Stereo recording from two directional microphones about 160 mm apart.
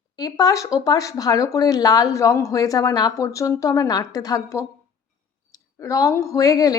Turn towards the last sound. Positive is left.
turn(degrees=20)  # may be behind; listen again after turning